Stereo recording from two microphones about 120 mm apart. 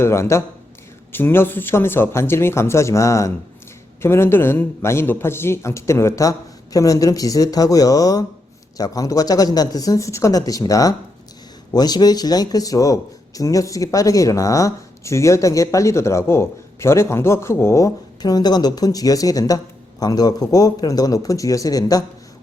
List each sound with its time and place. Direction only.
0.0 s speech: 20° left (ahead or behind)